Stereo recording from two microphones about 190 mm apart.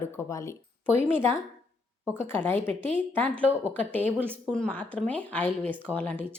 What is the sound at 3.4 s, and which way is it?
Speech, 10° right (ahead or behind).